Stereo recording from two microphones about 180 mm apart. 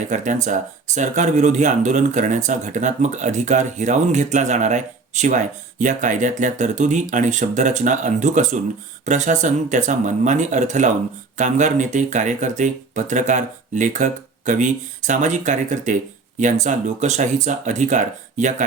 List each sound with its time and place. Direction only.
0.0 s speech: 40° right (ahead or behind)